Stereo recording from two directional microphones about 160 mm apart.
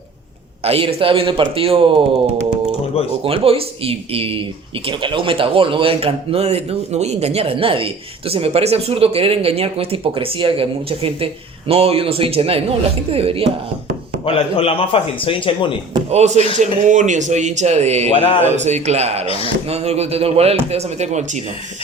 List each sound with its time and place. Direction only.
0.6 s a man's voice: 35° right (ahead or behind)
3.2 s a man's voice: 35° right (ahead or behind)
14.3 s a man's voice: 35° left (ahead or behind)
16.0 s speech: 45° right (ahead or behind)
18.1 s a man's voice: 35° left (ahead or behind)
18.5 s a man's voice: 45° right (ahead or behind)